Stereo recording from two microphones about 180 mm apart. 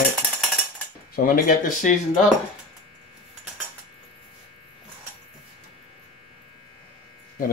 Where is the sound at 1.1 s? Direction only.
55° left (ahead or behind).